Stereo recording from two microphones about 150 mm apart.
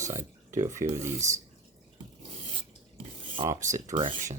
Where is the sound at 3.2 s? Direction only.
35° right (ahead or behind).